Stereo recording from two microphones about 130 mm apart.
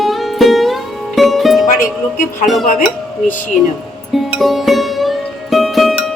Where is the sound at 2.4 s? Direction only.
Centre (ahead or behind).